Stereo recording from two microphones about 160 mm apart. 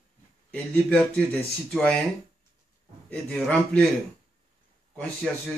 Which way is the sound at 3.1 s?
5° left (ahead or behind).